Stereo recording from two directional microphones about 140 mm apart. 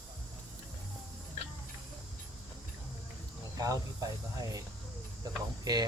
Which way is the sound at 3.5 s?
25° right (ahead or behind).